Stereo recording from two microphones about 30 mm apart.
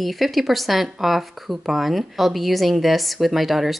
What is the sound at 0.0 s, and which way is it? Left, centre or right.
Speech, centre.